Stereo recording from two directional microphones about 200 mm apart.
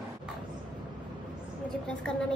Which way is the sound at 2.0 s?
5° left (ahead or behind).